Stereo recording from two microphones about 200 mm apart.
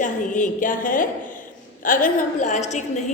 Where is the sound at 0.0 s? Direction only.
40° left (ahead or behind).